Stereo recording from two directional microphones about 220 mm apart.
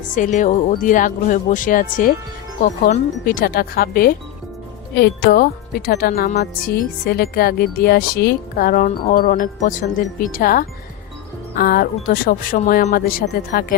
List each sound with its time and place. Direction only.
0.2 s speech: 35° left (ahead or behind)